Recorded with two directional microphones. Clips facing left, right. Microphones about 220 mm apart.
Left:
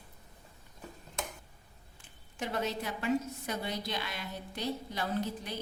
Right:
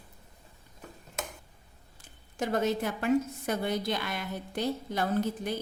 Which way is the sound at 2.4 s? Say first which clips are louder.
Right 6 dB; 45° right (ahead or behind).